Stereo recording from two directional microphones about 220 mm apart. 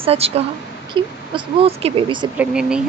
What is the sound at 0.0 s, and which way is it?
A woman's voice, 25° right (ahead or behind).